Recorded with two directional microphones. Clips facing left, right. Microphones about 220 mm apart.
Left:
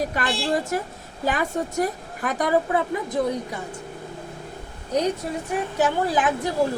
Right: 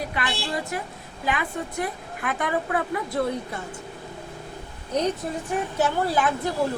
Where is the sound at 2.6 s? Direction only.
20° left (ahead or behind).